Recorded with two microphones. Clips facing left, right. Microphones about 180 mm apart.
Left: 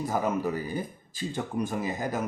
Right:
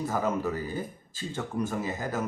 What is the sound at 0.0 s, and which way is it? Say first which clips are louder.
Speech: left 1 dB; 15° left (ahead or behind).